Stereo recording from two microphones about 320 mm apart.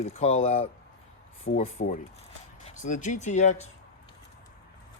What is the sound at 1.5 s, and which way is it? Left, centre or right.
Speech, left.